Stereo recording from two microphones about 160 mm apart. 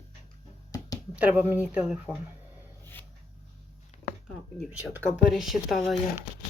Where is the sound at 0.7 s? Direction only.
25° left (ahead or behind).